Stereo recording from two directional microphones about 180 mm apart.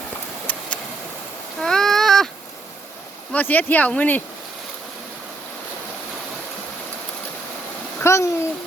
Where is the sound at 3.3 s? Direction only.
10° left (ahead or behind).